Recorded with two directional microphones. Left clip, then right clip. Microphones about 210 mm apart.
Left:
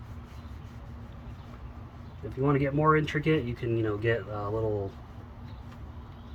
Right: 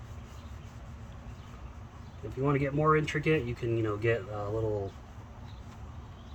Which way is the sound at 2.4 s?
Centre (ahead or behind).